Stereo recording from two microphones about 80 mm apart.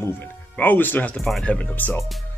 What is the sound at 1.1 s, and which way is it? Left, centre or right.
Speech, centre.